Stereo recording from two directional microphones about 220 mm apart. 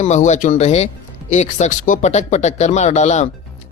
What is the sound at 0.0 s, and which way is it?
Speech, 30° left (ahead or behind).